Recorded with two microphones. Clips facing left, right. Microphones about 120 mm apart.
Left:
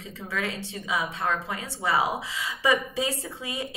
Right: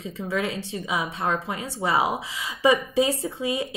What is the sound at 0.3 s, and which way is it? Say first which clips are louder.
A woman's voice: right 4 dB; 25° right (ahead or behind).